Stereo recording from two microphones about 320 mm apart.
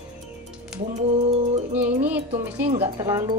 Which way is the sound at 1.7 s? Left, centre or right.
Centre.